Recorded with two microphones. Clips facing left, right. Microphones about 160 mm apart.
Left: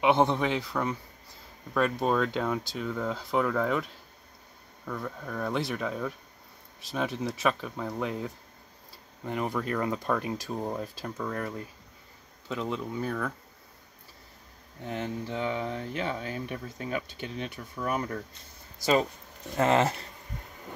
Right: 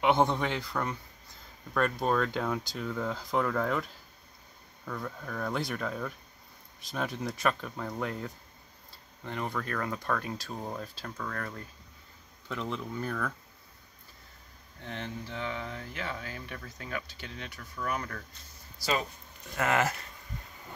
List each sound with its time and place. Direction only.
0.0 s speech: centre (ahead or behind)
14.8 s speech: 15° left (ahead or behind)
19.5 s speech: 25° left (ahead or behind)